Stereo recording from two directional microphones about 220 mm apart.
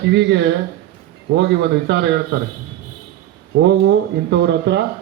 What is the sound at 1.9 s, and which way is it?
Speech, 55° right (ahead or behind).